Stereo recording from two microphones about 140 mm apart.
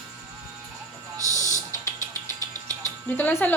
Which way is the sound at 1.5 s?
25° right (ahead or behind).